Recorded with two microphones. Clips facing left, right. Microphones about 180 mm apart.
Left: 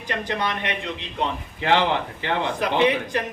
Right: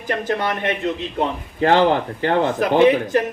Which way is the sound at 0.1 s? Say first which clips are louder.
Right 5 dB; 45° right (ahead or behind).